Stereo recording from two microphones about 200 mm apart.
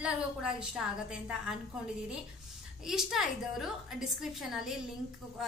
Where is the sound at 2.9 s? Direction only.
Centre (ahead or behind).